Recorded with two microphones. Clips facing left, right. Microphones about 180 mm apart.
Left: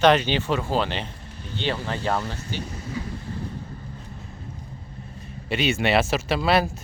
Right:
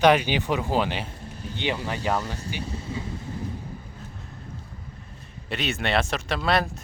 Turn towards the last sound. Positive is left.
turn(degrees=5)  # may be behind; listen again after turning